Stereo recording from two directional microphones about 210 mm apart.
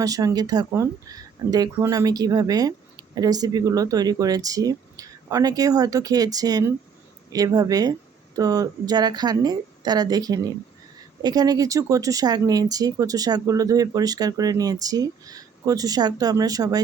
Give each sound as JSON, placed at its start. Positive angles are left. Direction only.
{"t": 0.0, "sound": "a woman's voice", "side_deg": -15}